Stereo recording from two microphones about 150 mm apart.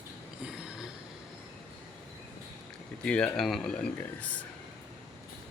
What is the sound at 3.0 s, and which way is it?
Speech, 10° left (ahead or behind).